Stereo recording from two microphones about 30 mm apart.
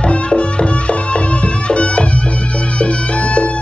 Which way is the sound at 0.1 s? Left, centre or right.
Left.